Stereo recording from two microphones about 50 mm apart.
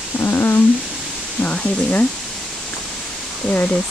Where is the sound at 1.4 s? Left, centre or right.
Left.